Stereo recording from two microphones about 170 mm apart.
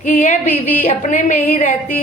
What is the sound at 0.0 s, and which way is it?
A woman's voice, 45° left (ahead or behind).